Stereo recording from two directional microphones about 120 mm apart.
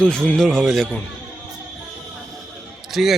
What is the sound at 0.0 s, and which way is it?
Speech, 10° left (ahead or behind).